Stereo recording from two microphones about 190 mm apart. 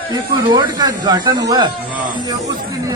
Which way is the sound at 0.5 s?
20° right (ahead or behind).